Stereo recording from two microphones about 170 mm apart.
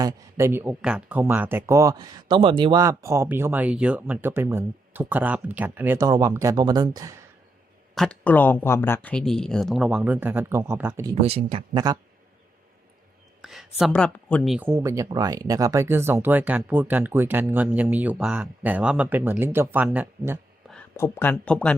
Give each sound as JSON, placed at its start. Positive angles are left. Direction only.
{"t": 0.0, "sound": "speech", "side_deg": -20}
{"t": 6.1, "sound": "speech", "side_deg": -20}
{"t": 7.9, "sound": "speech", "side_deg": 5}
{"t": 11.1, "sound": "speech", "side_deg": -35}
{"t": 13.4, "sound": "speech", "side_deg": 0}
{"t": 14.7, "sound": "speech", "side_deg": -20}
{"t": 20.9, "sound": "speech", "side_deg": 15}